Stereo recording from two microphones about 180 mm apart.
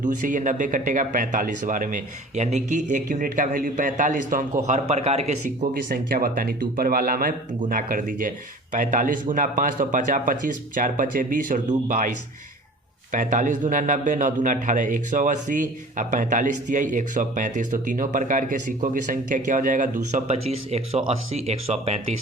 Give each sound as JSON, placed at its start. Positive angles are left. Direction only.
{"t": 0.0, "sound": "a man's voice", "side_deg": -45}